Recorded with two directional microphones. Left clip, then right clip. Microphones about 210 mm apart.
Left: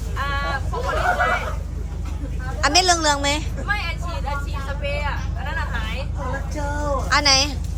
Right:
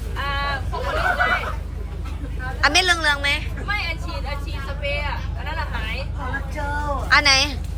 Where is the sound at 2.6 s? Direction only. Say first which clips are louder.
Even; 15° left (ahead or behind).